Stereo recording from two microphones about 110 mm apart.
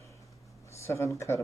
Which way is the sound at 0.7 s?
25° left (ahead or behind).